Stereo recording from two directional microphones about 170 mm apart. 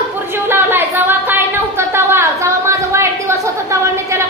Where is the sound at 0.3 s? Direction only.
15° right (ahead or behind).